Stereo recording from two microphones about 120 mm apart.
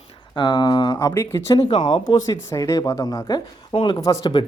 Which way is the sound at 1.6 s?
45° left (ahead or behind).